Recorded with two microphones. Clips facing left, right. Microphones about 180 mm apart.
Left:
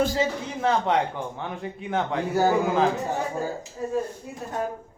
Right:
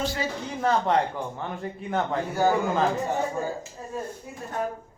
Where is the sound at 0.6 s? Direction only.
Centre (ahead or behind).